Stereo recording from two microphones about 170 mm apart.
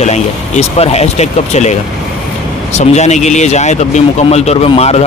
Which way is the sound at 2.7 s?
40° left (ahead or behind).